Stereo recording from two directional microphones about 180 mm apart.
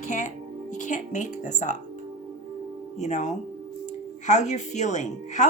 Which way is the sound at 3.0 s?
40° left (ahead or behind).